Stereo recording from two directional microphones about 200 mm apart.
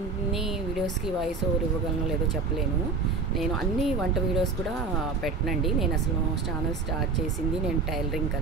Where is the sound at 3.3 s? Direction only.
Centre (ahead or behind).